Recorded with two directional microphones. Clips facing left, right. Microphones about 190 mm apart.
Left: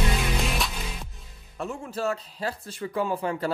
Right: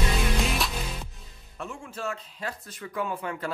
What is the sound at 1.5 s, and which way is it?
Speech, 40° left (ahead or behind).